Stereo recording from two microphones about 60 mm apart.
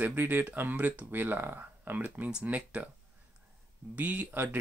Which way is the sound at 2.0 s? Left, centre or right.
Centre.